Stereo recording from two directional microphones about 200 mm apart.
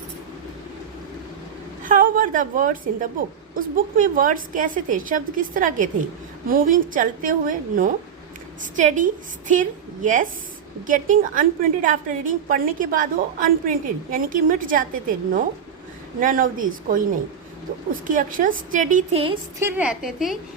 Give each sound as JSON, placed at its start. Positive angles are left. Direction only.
{"t": 1.8, "sound": "a woman's voice", "side_deg": -45}
{"t": 18.1, "sound": "a woman's voice", "side_deg": -40}
{"t": 19.5, "sound": "a woman's voice", "side_deg": -10}